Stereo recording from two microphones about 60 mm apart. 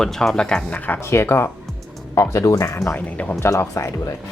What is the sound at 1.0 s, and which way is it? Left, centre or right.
Speech, left.